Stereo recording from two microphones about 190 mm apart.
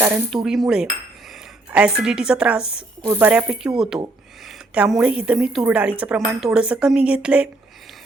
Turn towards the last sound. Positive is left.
turn(degrees=-5)  # may be behind; listen again after turning